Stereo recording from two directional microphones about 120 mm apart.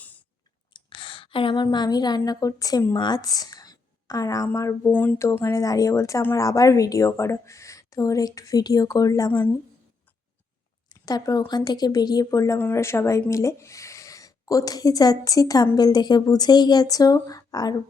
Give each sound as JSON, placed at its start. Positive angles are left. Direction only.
{"t": 0.7, "sound": "a sound", "side_deg": 45}
{"t": 1.6, "sound": "a woman's voice", "side_deg": 35}
{"t": 10.9, "sound": "speech", "side_deg": 30}